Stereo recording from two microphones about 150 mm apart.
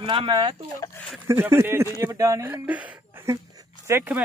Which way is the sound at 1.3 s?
15° right (ahead or behind).